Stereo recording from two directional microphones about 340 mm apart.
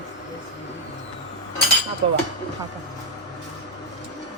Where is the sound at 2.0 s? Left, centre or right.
Centre.